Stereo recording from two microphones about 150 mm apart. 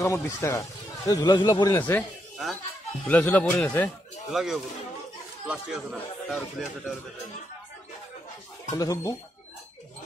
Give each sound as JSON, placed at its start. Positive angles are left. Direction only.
{"t": 0.0, "sound": "a man's voice", "side_deg": 20}
{"t": 1.8, "sound": "speech", "side_deg": 10}
{"t": 3.1, "sound": "speech", "side_deg": 10}
{"t": 4.3, "sound": "speech", "side_deg": 0}
{"t": 8.6, "sound": "a man's voice", "side_deg": 25}